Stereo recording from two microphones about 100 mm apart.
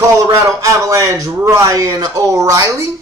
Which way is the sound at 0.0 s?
30° right (ahead or behind).